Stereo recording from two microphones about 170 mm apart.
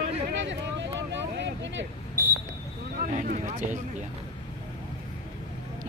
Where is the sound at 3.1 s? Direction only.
50° right (ahead or behind).